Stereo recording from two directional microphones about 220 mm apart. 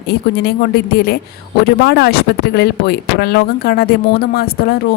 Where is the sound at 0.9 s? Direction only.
45° left (ahead or behind).